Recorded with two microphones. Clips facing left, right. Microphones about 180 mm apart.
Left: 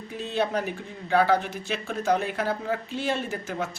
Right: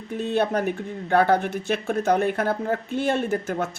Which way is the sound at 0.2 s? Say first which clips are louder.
Right 4 dB; 55° right (ahead or behind).